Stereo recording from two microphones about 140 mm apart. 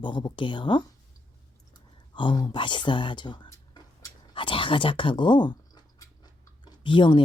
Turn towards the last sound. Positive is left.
turn(degrees=35)  # may be behind; listen again after turning